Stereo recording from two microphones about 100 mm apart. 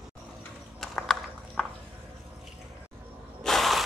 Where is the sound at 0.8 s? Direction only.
5° left (ahead or behind).